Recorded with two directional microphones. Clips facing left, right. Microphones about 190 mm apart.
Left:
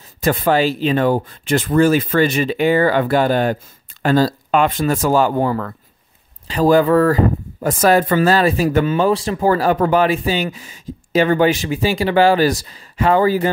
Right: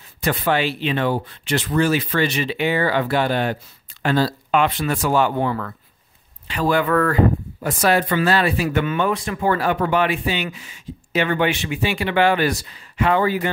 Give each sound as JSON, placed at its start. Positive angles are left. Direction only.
{"t": 0.2, "sound": "speech", "side_deg": 45}
{"t": 7.6, "sound": "speech", "side_deg": 45}